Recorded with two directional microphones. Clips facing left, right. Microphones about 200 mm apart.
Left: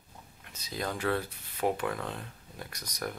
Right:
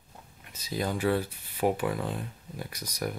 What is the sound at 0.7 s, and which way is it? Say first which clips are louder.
Speech: right 4 dB; 10° right (ahead or behind).